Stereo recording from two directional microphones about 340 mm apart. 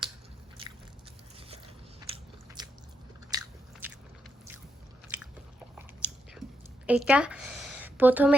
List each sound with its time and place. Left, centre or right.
0.6 s biting: centre
2.1 s biting: centre
5.0 s biting: centre
6.8 s a sound: centre